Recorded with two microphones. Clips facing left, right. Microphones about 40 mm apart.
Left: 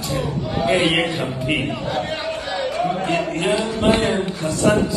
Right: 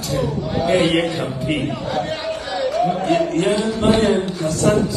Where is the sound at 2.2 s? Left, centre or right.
Left.